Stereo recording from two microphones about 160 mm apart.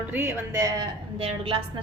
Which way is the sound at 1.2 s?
35° right (ahead or behind).